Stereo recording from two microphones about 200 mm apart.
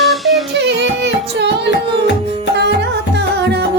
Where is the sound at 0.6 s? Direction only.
60° right (ahead or behind).